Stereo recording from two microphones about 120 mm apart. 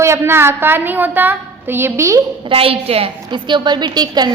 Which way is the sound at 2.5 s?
50° right (ahead or behind).